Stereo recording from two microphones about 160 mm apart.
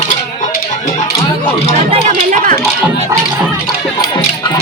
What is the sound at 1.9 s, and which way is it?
Speech, 50° right (ahead or behind).